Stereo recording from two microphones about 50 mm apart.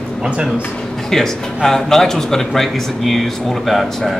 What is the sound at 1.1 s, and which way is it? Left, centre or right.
Speech, centre.